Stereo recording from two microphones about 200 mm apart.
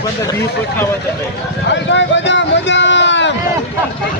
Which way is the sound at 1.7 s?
65° left (ahead or behind).